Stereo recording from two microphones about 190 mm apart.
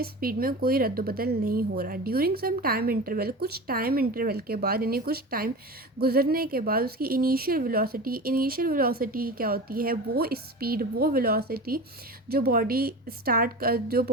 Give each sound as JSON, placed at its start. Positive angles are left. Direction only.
{"t": 0.0, "sound": "a woman's voice", "side_deg": -50}